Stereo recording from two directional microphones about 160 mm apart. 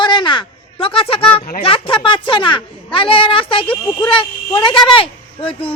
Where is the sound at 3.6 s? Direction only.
5° left (ahead or behind).